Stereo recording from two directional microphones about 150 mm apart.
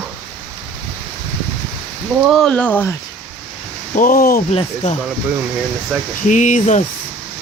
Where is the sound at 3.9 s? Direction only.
70° left (ahead or behind).